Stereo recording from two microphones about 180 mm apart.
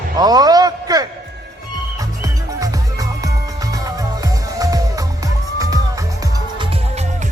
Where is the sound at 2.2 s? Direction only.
20° right (ahead or behind).